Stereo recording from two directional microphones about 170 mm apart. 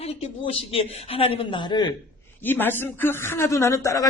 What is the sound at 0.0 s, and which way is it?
A man's voice, 35° left (ahead or behind).